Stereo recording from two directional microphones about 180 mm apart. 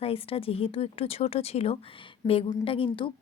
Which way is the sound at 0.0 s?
30° left (ahead or behind).